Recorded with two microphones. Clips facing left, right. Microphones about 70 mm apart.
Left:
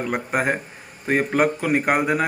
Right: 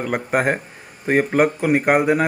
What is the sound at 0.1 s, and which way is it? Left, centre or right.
Speech, right.